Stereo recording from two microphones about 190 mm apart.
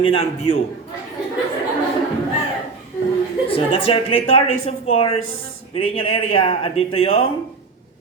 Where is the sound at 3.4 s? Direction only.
30° left (ahead or behind).